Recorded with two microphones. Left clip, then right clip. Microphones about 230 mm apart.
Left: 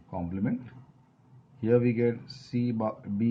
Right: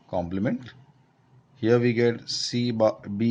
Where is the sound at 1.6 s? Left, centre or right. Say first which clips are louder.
Right 4 dB; right.